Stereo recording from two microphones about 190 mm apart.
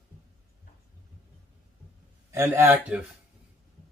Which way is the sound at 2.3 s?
15° right (ahead or behind).